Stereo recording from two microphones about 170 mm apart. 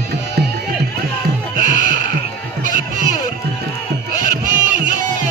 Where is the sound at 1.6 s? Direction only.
45° right (ahead or behind).